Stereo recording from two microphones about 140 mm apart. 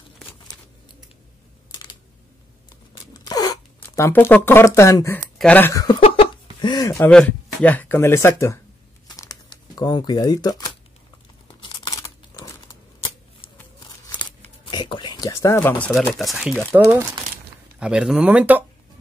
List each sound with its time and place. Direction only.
3.1 s zipper: 25° left (ahead or behind)
5.4 s speech: 10° left (ahead or behind)
5.7 s speech: 25° left (ahead or behind)
5.9 s cough: 40° left (ahead or behind)
6.6 s a sound: 30° left (ahead or behind)
7.0 s speech: 10° left (ahead or behind)
9.0 s crumpling: 25° left (ahead or behind)
14.7 s a sound: 35° left (ahead or behind)
16.2 s speech: centre (ahead or behind)
17.7 s speech: 5° right (ahead or behind)